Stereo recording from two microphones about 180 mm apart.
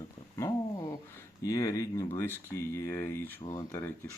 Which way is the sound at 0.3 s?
15° left (ahead or behind).